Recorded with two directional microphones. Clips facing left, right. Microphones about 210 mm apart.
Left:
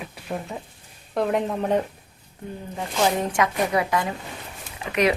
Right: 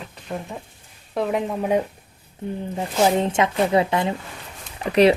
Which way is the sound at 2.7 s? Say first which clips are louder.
Right 3 dB; 25° right (ahead or behind).